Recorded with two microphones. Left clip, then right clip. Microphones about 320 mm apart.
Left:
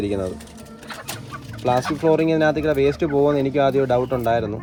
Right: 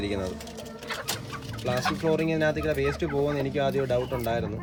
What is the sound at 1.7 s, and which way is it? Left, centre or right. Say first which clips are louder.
Speech: left 8 dB; left.